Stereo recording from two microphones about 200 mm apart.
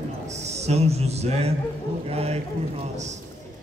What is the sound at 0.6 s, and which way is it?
A man's voice, 30° right (ahead or behind).